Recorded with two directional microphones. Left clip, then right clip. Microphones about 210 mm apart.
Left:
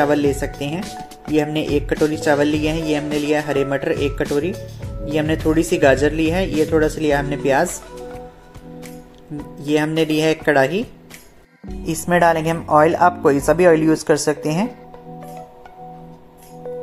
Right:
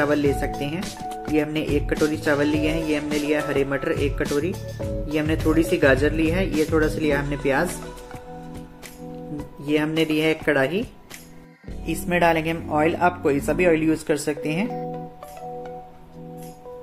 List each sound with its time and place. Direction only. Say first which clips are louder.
0.0 s speech: left 4 dB; 15° left (ahead or behind)
0.7 s speech: even; centre (ahead or behind)
1.3 s speech: left 5 dB; 15° left (ahead or behind)
5.1 s speech: left 4 dB; 15° left (ahead or behind)
6.5 s speech: left 5 dB; centre (ahead or behind)
7.0 s speech: left 4 dB; 10° left (ahead or behind)
9.7 s speech: left 4 dB; 15° left (ahead or behind)